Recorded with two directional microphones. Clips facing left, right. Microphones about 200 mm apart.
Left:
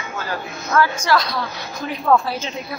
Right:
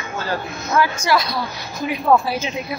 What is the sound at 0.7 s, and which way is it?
A woman's voice, 15° right (ahead or behind).